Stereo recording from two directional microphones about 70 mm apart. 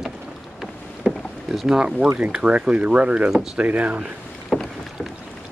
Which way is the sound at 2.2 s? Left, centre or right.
Centre.